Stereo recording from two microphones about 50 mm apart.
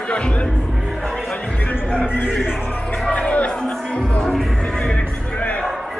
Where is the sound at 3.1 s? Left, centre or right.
Left.